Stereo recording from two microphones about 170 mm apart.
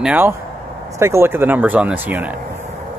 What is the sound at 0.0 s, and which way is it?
Speech, 5° right (ahead or behind).